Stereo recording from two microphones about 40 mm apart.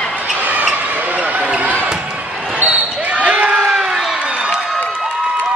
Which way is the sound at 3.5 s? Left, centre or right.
Centre.